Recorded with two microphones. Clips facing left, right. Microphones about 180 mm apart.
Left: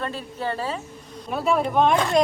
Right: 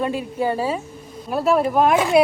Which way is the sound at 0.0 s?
10° right (ahead or behind).